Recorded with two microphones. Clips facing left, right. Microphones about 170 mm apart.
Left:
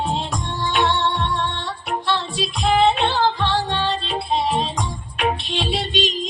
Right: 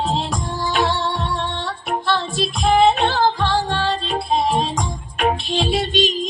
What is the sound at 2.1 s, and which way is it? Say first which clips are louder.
Music: right 3 dB; 45° right (ahead or behind).